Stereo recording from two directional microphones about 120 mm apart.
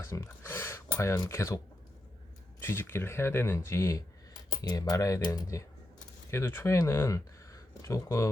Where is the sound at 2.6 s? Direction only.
20° left (ahead or behind).